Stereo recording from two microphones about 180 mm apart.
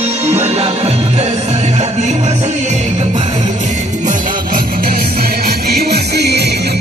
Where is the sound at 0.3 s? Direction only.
35° right (ahead or behind).